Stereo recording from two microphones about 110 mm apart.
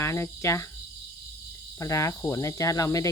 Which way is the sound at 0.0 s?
25° left (ahead or behind).